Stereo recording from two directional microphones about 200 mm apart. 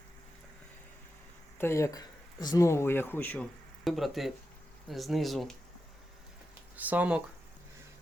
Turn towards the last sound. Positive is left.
turn(degrees=-5)  # may be behind; listen again after turning